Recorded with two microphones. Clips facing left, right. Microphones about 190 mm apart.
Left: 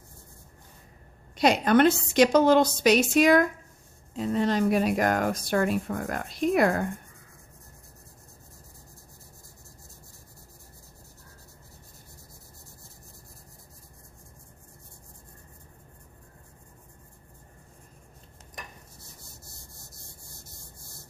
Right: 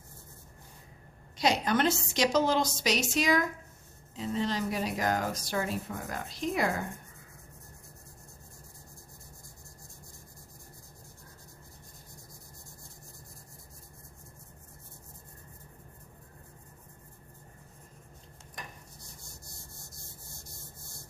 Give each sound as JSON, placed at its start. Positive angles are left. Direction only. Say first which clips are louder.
{"t": 1.4, "sound": "speech", "louder": "left 7 dB", "side_deg": 60}